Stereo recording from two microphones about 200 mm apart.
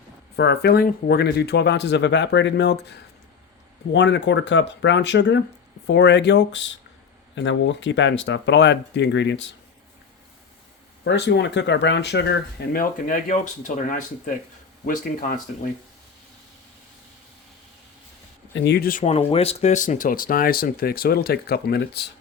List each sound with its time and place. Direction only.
0.3 s speech: 55° left (ahead or behind)
11.0 s speech: 60° left (ahead or behind); by 15.4 s 40° left (ahead or behind)
18.5 s speech: 55° left (ahead or behind)
19.0 s speech: 30° left (ahead or behind); by 22.0 s 50° left (ahead or behind)